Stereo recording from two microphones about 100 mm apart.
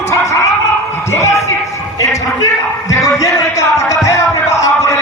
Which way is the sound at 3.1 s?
35° left (ahead or behind).